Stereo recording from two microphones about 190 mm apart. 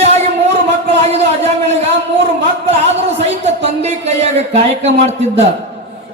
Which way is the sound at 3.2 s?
35° right (ahead or behind).